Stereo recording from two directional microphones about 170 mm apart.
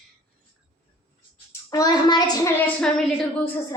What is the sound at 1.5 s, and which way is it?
A child's voice, 20° left (ahead or behind).